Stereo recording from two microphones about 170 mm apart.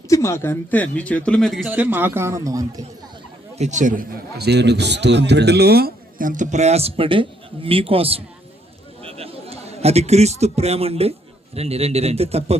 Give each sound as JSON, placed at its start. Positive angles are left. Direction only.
{"t": 0.1, "sound": "speech", "side_deg": 15}
{"t": 3.6, "sound": "a man's voice", "side_deg": -45}
{"t": 4.4, "sound": "a man's voice", "side_deg": -80}